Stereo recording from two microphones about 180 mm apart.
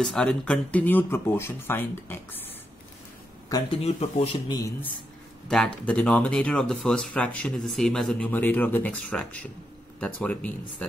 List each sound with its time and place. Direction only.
0.0 s speech: 5° left (ahead or behind)
3.4 s speech: 20° left (ahead or behind)
3.8 s speech: 35° left (ahead or behind)
4.5 s speech: 20° left (ahead or behind)
5.5 s speech: 5° left (ahead or behind)